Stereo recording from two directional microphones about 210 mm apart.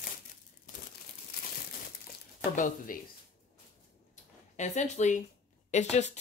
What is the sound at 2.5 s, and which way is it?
Speech, 40° left (ahead or behind).